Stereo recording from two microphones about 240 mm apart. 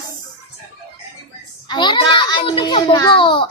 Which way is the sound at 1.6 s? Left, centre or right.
Centre.